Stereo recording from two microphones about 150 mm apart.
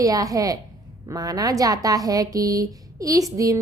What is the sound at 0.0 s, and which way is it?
A woman's voice, 25° right (ahead or behind).